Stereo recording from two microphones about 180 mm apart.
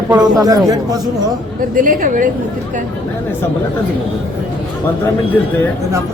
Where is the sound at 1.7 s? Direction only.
50° right (ahead or behind).